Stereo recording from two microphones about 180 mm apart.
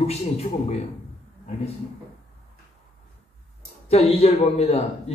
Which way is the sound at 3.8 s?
35° left (ahead or behind).